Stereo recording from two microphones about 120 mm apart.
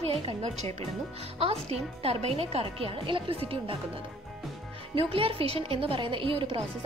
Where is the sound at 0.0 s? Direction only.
55° right (ahead or behind).